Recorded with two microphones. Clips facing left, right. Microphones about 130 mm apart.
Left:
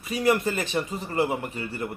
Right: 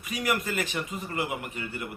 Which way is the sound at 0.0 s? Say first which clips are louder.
Left 6 dB; 30° left (ahead or behind).